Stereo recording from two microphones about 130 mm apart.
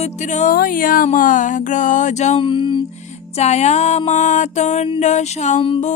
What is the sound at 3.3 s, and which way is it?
Music, 55° left (ahead or behind).